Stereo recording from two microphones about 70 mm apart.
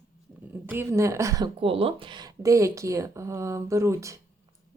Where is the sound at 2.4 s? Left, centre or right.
Right.